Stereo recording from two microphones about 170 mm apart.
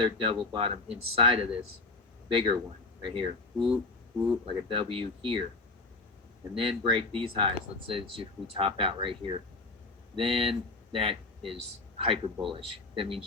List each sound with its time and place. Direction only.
0.0 s speech: 30° right (ahead or behind)
6.6 s speech: 30° right (ahead or behind)